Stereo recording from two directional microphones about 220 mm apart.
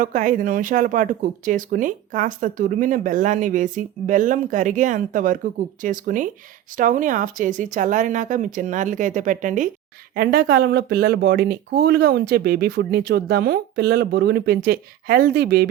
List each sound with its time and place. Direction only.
0.0 s speech: 35° right (ahead or behind)
10.2 s speech: 45° right (ahead or behind)